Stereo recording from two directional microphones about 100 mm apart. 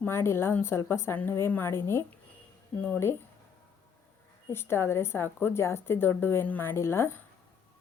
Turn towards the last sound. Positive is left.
turn(degrees=25)  # may be behind; listen again after turning